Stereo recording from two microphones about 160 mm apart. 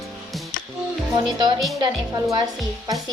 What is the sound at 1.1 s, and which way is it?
Speech, 25° right (ahead or behind).